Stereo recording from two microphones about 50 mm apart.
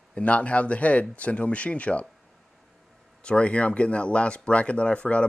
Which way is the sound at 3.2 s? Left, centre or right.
Left.